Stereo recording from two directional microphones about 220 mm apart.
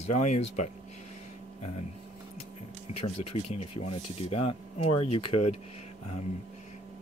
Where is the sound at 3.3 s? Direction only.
25° left (ahead or behind).